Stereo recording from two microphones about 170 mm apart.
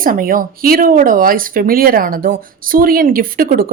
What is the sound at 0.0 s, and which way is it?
Speech, 55° right (ahead or behind).